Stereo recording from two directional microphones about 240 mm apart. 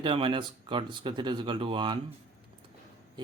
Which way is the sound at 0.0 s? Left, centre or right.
Right.